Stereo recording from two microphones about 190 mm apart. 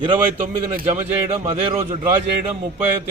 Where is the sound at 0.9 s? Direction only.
10° right (ahead or behind).